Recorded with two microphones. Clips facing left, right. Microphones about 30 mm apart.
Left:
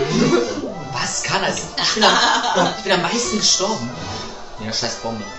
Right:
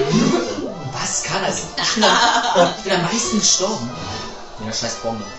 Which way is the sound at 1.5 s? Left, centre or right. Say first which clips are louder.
Left 1 dB; left.